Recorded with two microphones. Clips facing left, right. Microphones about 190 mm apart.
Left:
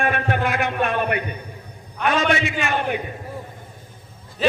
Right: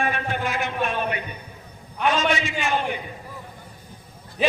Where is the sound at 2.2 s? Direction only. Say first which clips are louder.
Left 2 dB; 60° left (ahead or behind).